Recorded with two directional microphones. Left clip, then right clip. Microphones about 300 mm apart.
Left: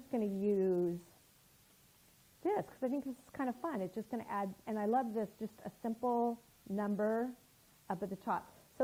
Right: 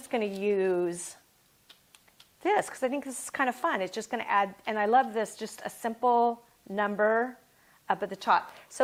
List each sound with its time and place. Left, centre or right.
0.1 s a woman's voice: centre
2.4 s a woman's voice: centre